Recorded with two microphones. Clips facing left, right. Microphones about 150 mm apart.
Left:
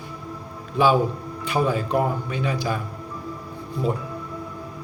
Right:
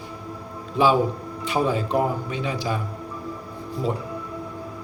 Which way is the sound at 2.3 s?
25° right (ahead or behind).